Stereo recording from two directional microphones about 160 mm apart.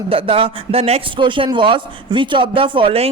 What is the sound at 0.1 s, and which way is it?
A woman's voice, 35° right (ahead or behind).